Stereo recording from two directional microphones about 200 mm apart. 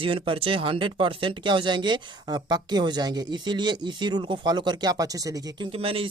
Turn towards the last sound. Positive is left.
turn(degrees=-30)  # may be behind; listen again after turning